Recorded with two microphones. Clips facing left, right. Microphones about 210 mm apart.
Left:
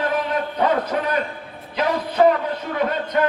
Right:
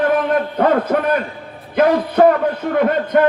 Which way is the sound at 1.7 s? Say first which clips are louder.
Right 8 dB; 55° right (ahead or behind).